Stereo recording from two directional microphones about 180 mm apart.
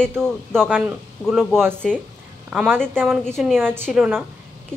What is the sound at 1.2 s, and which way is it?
Speech, centre (ahead or behind).